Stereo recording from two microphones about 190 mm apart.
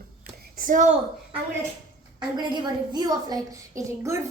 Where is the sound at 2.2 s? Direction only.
20° right (ahead or behind).